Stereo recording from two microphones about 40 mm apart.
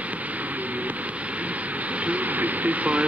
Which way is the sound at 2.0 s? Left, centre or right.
Right.